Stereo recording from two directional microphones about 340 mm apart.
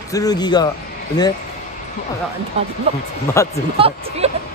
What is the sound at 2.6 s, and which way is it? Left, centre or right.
Speech, centre.